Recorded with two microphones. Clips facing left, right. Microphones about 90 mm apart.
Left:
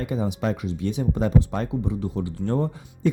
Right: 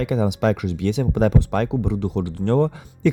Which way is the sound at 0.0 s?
90° right.